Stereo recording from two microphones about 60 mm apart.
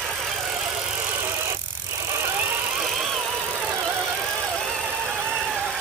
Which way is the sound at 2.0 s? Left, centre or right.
Right.